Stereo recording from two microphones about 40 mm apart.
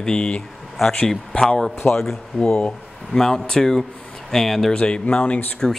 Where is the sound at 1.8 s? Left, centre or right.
Left.